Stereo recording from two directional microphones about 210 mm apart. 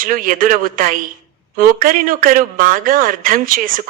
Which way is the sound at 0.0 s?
40° right (ahead or behind).